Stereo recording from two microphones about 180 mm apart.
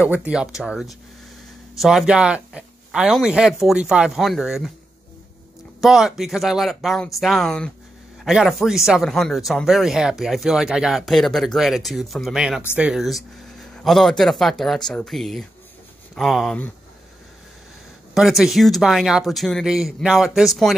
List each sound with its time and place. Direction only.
0.0 s speech: 10° right (ahead or behind)
5.8 s speech: centre (ahead or behind)
18.1 s speech: centre (ahead or behind)